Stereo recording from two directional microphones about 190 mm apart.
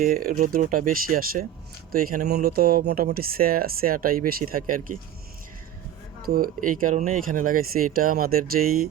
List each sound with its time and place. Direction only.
0.0 s speech: 45° right (ahead or behind)
6.2 s speech: 50° right (ahead or behind)